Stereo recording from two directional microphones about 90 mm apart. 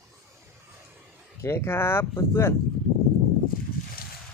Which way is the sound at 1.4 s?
30° left (ahead or behind).